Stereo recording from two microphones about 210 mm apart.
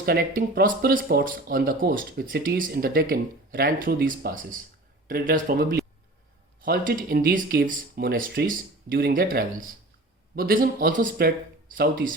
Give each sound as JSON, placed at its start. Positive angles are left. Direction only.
{"t": 0.0, "sound": "speech", "side_deg": -45}